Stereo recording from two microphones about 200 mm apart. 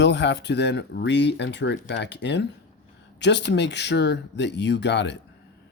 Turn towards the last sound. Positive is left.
turn(degrees=60)  # may be behind; listen again after turning